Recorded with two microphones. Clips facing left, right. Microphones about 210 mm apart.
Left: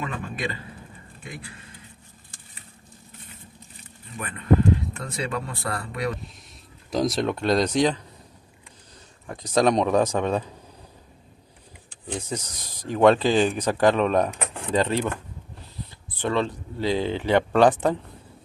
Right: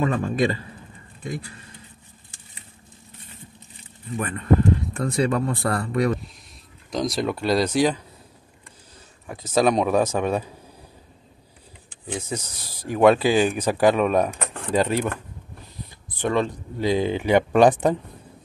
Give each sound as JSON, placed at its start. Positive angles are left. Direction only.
{"t": 0.0, "sound": "a man's voice", "side_deg": -40}
{"t": 4.9, "sound": "speech", "side_deg": -50}
{"t": 6.9, "sound": "speech", "side_deg": 0}
{"t": 9.3, "sound": "speech", "side_deg": -5}
{"t": 12.1, "sound": "speech", "side_deg": -10}
{"t": 16.1, "sound": "speech", "side_deg": -15}